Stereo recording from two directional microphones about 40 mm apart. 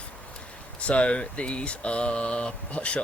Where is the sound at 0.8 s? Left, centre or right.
Left.